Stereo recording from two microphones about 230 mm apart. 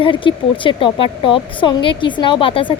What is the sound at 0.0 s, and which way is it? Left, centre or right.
Speech, left.